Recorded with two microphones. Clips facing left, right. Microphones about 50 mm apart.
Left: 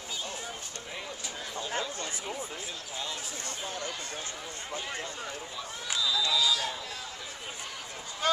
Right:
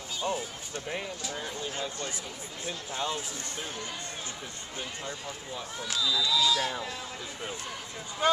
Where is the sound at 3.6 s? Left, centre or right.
Centre.